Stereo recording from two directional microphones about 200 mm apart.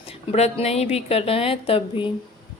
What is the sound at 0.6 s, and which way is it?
A woman's voice, 30° left (ahead or behind).